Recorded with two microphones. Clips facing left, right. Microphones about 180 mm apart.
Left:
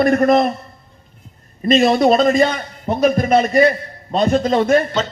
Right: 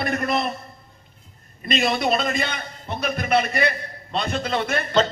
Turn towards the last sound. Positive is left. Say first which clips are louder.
# left 10 dB
turn(degrees=40)  # may be behind; listen again after turning